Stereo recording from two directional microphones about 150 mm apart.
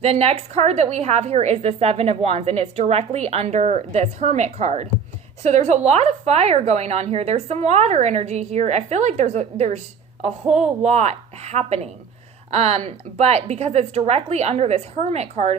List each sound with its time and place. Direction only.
0.0 s a woman's voice: 45° right (ahead or behind)